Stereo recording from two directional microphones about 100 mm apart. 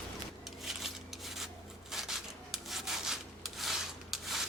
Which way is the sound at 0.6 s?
5° right (ahead or behind).